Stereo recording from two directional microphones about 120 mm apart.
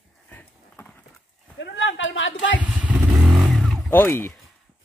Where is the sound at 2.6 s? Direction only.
10° right (ahead or behind).